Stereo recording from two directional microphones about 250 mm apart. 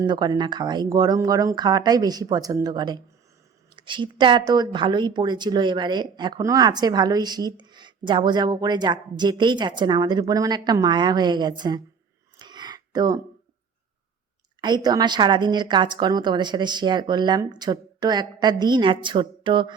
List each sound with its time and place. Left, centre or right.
0.0 s speech: centre
12.4 s a sound: centre
14.6 s speech: centre